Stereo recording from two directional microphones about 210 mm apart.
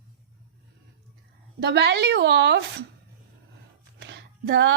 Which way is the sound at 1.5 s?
50° right (ahead or behind).